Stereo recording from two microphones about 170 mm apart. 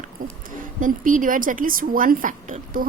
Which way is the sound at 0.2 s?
55° right (ahead or behind).